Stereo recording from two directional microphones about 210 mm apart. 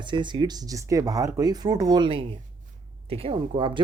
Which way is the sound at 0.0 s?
20° right (ahead or behind).